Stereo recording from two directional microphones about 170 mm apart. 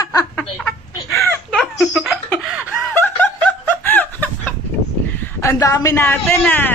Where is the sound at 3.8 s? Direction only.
10° left (ahead or behind).